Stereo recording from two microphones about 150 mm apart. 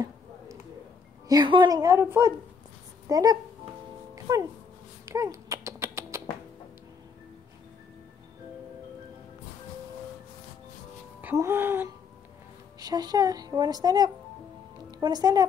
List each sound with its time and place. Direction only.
1.3 s a woman's voice: 30° right (ahead or behind)
4.1 s music: 20° right (ahead or behind)
5.0 s a sound: 20° right (ahead or behind)
11.1 s speech: 15° right (ahead or behind)
12.7 s a woman's voice: 25° right (ahead or behind)